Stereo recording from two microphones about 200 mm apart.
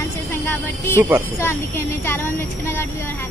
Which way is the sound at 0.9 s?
10° right (ahead or behind).